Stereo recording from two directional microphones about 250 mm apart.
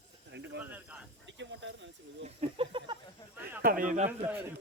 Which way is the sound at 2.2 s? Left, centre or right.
Right.